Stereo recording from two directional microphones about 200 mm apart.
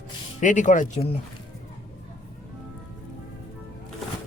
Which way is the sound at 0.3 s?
40° left (ahead or behind).